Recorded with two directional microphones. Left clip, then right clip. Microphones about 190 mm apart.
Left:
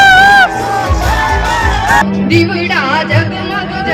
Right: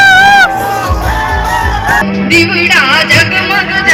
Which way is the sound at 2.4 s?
65° left (ahead or behind).